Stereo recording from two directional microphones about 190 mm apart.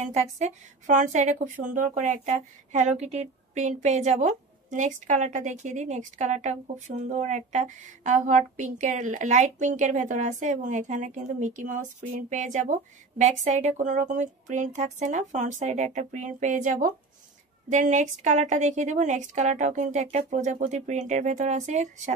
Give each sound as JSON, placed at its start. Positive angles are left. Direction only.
{"t": 0.0, "sound": "speech", "side_deg": -35}